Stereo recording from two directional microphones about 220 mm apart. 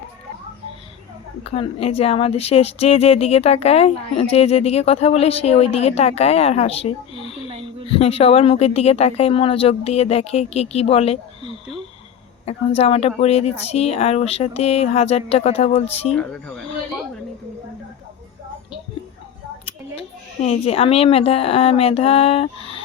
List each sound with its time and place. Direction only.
1.5 s a woman's voice: 25° left (ahead or behind)
7.5 s a sound: 25° right (ahead or behind)
7.9 s a woman's voice: 25° left (ahead or behind)
16.1 s speech: 5° left (ahead or behind)
19.6 s a woman's voice: 25° left (ahead or behind)